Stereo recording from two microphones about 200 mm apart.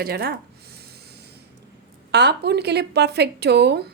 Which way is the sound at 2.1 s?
55° right (ahead or behind).